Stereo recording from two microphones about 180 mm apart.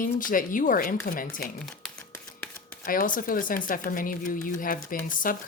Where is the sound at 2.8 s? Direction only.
50° left (ahead or behind).